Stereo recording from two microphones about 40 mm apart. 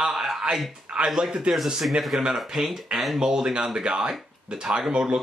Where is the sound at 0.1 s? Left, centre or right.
Centre.